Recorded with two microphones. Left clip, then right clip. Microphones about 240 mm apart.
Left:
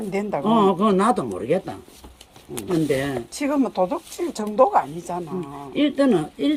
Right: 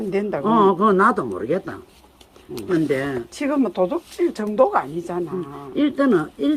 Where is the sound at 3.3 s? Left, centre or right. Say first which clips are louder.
Right 1 dB; centre.